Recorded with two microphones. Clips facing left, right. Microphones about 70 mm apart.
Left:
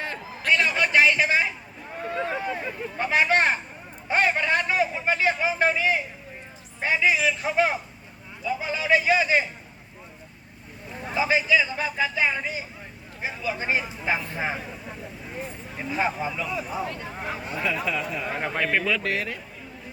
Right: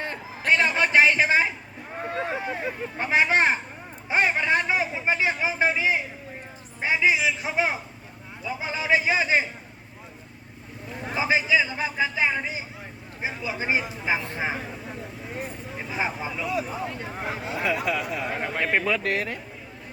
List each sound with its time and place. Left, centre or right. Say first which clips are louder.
0.0 s a sound: right 1 dB; right
6.7 s a man's voice: even; centre
11.1 s a man's voice: left 1 dB; right
17.2 s a man's voice: right 1 dB; centre
17.6 s speech: right 1 dB; right
18.3 s a man's voice: left 1 dB; centre
18.9 s speech: right 1 dB; right